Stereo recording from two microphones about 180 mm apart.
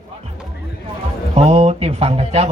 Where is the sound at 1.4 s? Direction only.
35° right (ahead or behind).